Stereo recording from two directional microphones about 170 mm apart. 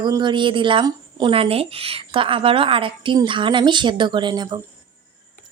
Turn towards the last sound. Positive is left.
turn(degrees=-25)  # may be behind; listen again after turning